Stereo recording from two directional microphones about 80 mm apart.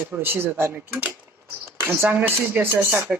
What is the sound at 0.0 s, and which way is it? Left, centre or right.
Speech, right.